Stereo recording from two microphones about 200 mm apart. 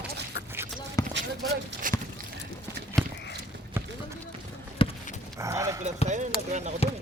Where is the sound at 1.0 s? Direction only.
15° left (ahead or behind).